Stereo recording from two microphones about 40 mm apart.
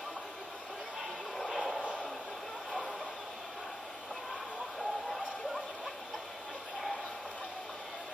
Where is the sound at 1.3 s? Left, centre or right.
Centre.